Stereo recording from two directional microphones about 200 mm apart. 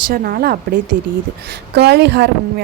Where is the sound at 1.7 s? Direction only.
55° right (ahead or behind).